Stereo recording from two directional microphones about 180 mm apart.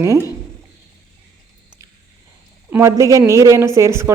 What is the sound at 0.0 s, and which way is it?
Speech, 15° right (ahead or behind).